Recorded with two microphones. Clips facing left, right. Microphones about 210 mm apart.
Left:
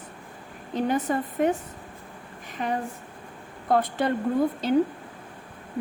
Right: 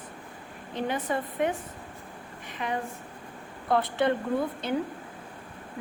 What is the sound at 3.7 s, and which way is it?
Speech, 45° left (ahead or behind).